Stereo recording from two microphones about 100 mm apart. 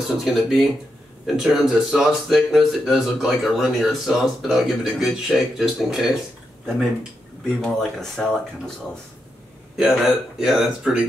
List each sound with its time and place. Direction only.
0.2 s speech: 5° right (ahead or behind)
7.6 s speech: 5° left (ahead or behind)
9.8 s speech: 5° right (ahead or behind)